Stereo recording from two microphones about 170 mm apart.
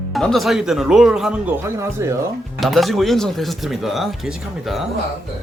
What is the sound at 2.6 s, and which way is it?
Speech, centre (ahead or behind).